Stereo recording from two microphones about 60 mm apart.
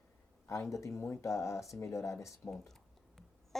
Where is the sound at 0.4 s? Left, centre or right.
Left.